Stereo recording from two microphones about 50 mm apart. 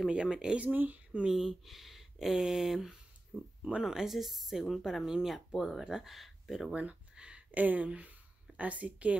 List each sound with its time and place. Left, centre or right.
0.1 s speech: centre
0.6 s speech: right
1.2 s speech: centre
3.3 s speech: left
3.8 s speech: centre
6.7 s a sound: right
7.6 s speech: right